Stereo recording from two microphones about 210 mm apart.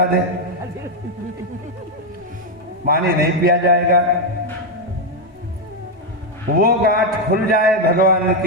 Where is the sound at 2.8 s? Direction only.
45° right (ahead or behind).